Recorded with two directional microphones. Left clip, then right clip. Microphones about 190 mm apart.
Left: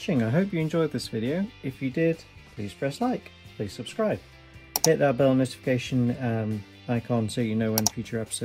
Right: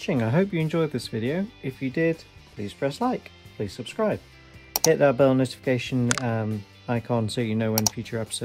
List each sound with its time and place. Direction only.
0.0 s speech: 50° right (ahead or behind)